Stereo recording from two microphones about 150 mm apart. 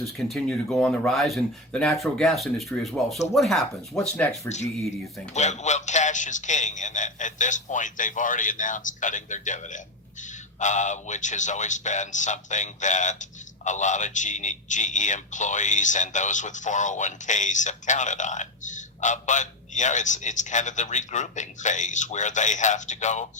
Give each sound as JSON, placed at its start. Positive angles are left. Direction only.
{"t": 0.0, "sound": "speech", "side_deg": 5}
{"t": 4.4, "sound": "a man's voice", "side_deg": 50}